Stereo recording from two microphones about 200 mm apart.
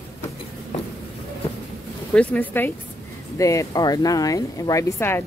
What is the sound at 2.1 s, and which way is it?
A woman's voice, 5° left (ahead or behind).